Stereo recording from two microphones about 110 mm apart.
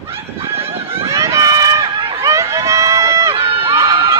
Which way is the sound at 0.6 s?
60° right (ahead or behind).